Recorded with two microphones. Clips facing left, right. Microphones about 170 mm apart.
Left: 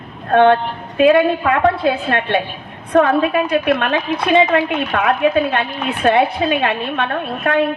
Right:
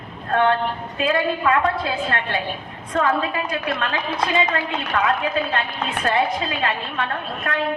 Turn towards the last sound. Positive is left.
turn(degrees=65)  # may be behind; listen again after turning